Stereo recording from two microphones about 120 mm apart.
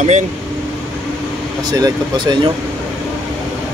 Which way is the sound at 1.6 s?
35° right (ahead or behind).